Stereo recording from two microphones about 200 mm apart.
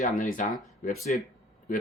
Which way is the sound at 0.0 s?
40° left (ahead or behind).